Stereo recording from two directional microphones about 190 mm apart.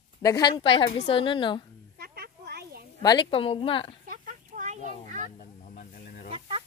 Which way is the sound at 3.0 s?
25° left (ahead or behind).